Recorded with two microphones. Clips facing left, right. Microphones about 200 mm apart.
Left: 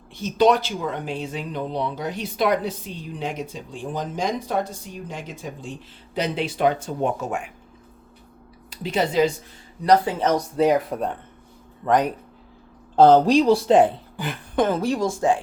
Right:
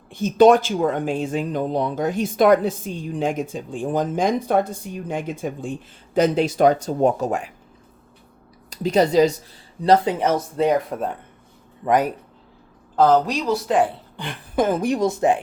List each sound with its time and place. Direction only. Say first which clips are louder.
0.1 s speech: right 5 dB; 50° right (ahead or behind)
8.7 s speech: right 5 dB; 40° right (ahead or behind)
9.8 s speech: right 1 dB; 25° right (ahead or behind)
10.2 s a woman's voice: left 3 dB; centre (ahead or behind)
13.0 s speech: left 3 dB; 30° left (ahead or behind)
14.2 s a woman's voice: left 3 dB; 10° left (ahead or behind)
14.5 s a woman's voice: right 1 dB; 10° right (ahead or behind)